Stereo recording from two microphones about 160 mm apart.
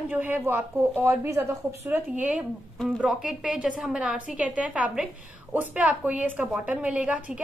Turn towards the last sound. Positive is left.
turn(degrees=-10)  # may be behind; listen again after turning